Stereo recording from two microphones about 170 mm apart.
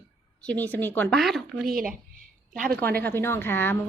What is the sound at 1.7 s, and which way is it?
Speech, 55° right (ahead or behind).